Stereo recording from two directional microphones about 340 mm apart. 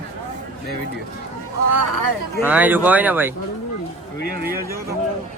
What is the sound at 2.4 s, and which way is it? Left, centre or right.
Speech, centre.